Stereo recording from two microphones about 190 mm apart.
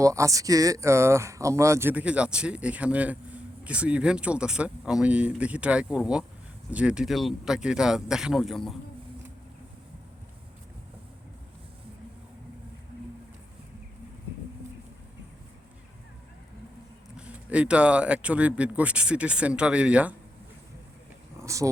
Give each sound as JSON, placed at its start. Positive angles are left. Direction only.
{"t": 0.0, "sound": "speech", "side_deg": -15}
{"t": 17.2, "sound": "speech", "side_deg": -5}
{"t": 21.3, "sound": "a sound", "side_deg": -15}